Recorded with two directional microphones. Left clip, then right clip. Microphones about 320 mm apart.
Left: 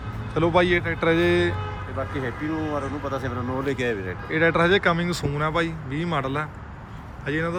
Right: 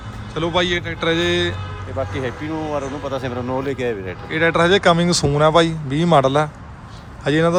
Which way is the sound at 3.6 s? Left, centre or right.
Centre.